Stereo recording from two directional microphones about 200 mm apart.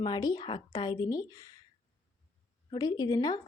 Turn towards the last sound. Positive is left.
turn(degrees=20)  # may be behind; listen again after turning